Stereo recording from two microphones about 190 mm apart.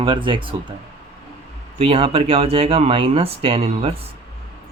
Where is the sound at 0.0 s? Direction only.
25° right (ahead or behind).